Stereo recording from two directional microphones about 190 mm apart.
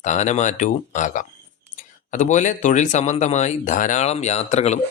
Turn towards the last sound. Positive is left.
turn(degrees=35)  # may be behind; listen again after turning